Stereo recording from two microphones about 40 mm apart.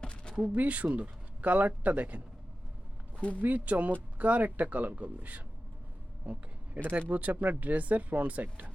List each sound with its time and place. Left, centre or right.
0.0 s a sound: left
0.3 s speech: right
3.2 s speech: left
3.4 s speech: right
6.8 s speech: right